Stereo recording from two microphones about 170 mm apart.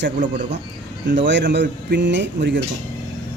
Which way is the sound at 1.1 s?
90° right.